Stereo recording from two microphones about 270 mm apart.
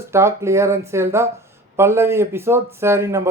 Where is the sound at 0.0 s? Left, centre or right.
Centre.